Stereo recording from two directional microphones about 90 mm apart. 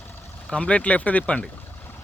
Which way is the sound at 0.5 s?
15° left (ahead or behind).